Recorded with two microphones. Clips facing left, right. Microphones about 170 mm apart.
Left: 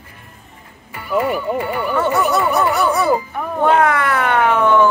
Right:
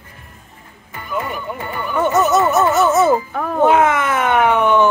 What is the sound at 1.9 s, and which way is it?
Speech, 20° right (ahead or behind).